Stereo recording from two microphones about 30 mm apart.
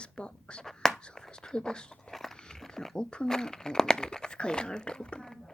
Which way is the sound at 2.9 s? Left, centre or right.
Left.